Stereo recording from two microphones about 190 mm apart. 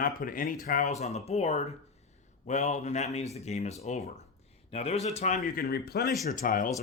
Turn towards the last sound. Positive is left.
turn(degrees=45)  # may be behind; listen again after turning